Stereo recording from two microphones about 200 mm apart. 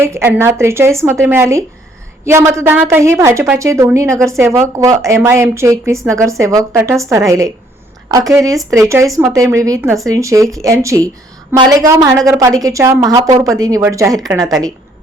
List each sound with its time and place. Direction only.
0.0 s a woman's voice: 15° right (ahead or behind)